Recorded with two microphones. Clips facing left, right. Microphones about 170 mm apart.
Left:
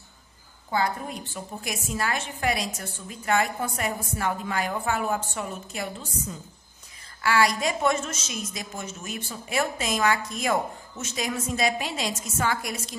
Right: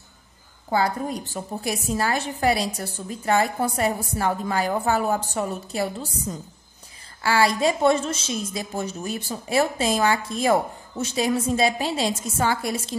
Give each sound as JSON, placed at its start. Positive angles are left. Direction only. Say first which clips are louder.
{"t": 0.7, "sound": "a woman's voice", "louder": "right 4 dB", "side_deg": -35}